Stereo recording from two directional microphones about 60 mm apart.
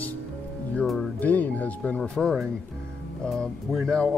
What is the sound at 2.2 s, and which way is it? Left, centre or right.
Speech, centre.